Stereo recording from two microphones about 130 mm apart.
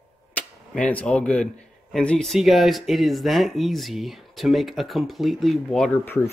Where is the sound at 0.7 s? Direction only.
10° left (ahead or behind).